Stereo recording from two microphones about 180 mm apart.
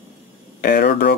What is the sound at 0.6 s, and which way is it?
Speech, 60° left (ahead or behind).